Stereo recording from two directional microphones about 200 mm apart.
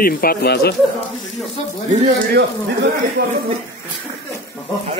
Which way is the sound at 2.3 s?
60° right (ahead or behind).